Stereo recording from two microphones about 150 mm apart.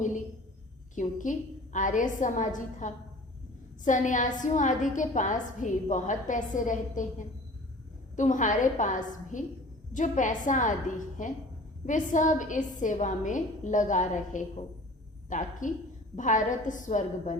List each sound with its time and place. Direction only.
0.9 s a woman's voice: 60° left (ahead or behind)